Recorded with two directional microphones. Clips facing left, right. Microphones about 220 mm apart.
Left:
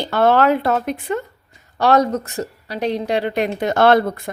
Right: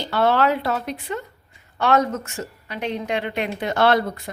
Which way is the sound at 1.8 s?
35° left (ahead or behind).